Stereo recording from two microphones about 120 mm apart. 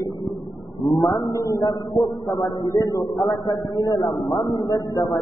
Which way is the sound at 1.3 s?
25° left (ahead or behind).